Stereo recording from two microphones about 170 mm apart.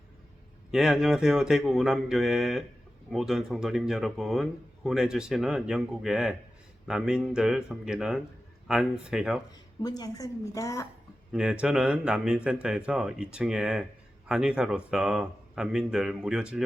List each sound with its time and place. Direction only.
0.7 s speech: 5° right (ahead or behind)
9.8 s a woman's voice: 20° left (ahead or behind)
11.3 s speech: 5° right (ahead or behind)